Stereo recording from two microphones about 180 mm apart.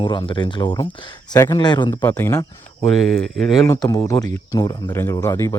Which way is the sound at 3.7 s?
20° left (ahead or behind).